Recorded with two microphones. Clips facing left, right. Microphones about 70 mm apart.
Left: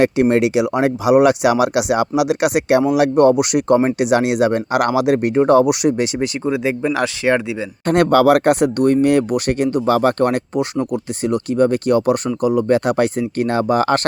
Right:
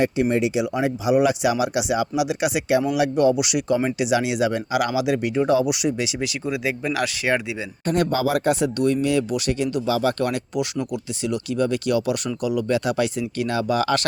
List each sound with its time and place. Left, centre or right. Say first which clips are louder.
0.0 s speech: left 6 dB; left
6.1 s speech: left 6 dB; left
7.9 s speech: left 9 dB; left